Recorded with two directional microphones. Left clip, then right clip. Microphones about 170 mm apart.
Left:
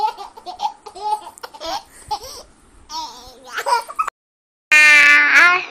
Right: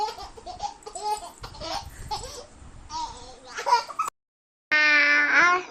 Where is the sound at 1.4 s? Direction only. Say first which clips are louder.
Left 7 dB; 75° left (ahead or behind).